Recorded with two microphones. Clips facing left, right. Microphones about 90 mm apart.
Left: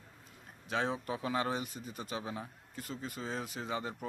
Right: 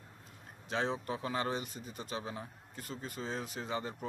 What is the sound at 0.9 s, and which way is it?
Speech, 10° left (ahead or behind).